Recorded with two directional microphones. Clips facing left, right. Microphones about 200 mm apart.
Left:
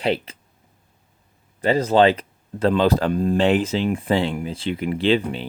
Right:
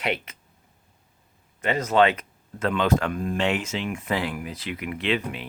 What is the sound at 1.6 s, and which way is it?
Speech, 30° left (ahead or behind).